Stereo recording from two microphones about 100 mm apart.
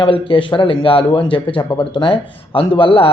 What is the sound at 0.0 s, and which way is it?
A man's voice, 60° left (ahead or behind).